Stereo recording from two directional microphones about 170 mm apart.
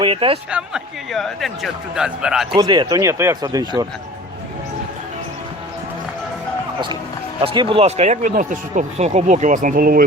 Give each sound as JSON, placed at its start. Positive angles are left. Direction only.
{"t": 0.0, "sound": "speech", "side_deg": -30}
{"t": 0.5, "sound": "a man's voice", "side_deg": 0}
{"t": 2.6, "sound": "speech", "side_deg": -25}
{"t": 7.4, "sound": "speech", "side_deg": -30}